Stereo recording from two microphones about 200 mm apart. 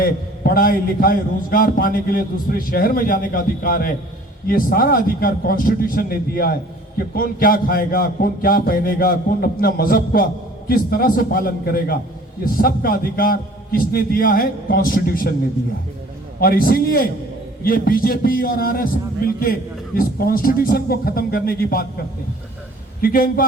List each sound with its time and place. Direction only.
0.0 s a man's voice: 50° left (ahead or behind)
16.4 s a man's voice: 45° left (ahead or behind)
23.0 s a man's voice: 45° left (ahead or behind)